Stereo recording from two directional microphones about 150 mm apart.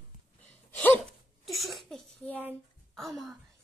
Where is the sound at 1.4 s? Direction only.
Centre (ahead or behind).